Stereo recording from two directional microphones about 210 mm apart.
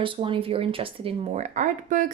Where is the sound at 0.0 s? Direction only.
25° right (ahead or behind).